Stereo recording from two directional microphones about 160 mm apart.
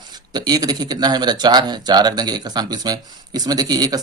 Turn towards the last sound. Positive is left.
turn(degrees=-25)  # may be behind; listen again after turning